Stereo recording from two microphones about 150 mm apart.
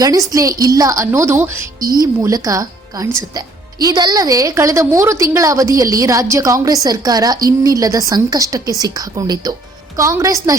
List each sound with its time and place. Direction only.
0.0 s a woman's voice: 25° right (ahead or behind)